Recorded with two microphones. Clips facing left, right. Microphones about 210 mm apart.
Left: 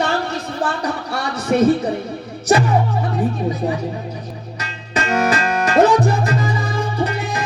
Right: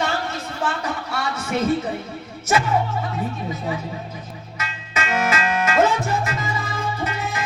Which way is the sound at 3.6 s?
45° left (ahead or behind).